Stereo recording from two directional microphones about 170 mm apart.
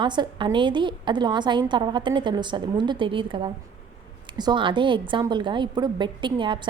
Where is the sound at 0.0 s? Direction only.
25° right (ahead or behind).